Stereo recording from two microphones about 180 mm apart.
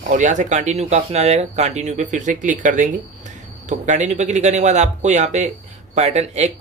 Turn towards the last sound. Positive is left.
turn(degrees=-40)  # may be behind; listen again after turning